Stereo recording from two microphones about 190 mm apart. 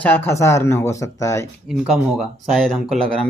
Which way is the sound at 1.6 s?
Centre (ahead or behind).